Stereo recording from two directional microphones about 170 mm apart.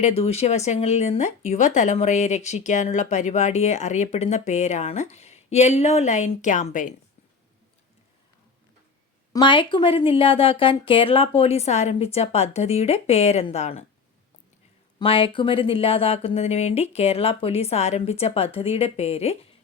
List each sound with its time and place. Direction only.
0.0 s speech: 35° left (ahead or behind)
9.3 s speech: 30° left (ahead or behind)
14.9 s speech: 30° left (ahead or behind)